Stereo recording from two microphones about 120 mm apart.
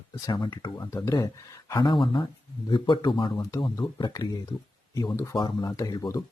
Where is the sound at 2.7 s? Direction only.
40° left (ahead or behind).